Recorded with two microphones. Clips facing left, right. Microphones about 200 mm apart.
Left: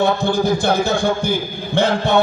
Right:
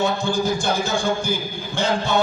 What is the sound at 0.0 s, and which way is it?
Speech, 60° left (ahead or behind).